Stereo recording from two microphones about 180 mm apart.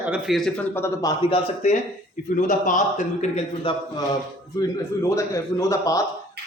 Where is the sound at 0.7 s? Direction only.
15° left (ahead or behind); by 2.8 s 45° left (ahead or behind).